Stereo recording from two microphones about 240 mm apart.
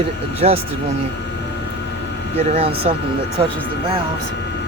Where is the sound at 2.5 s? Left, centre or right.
Right.